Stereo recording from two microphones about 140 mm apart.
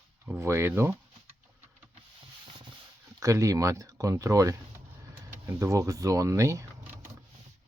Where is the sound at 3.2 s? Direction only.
25° right (ahead or behind).